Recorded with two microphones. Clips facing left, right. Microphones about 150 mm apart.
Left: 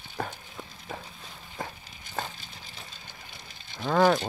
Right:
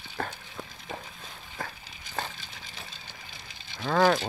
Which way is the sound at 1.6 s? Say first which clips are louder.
Left 1 dB; 20° left (ahead or behind).